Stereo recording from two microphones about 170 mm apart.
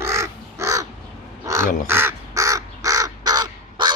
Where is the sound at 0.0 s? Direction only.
15° right (ahead or behind).